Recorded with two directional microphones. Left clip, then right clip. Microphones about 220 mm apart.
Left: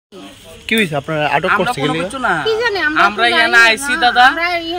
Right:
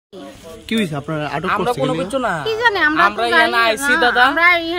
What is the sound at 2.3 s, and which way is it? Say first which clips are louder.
Speech: left 5 dB; 30° right (ahead or behind).